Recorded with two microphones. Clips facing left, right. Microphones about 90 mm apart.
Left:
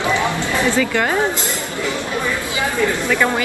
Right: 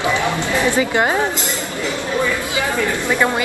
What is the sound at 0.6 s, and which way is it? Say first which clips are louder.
Speech: right 1 dB; 20° right (ahead or behind).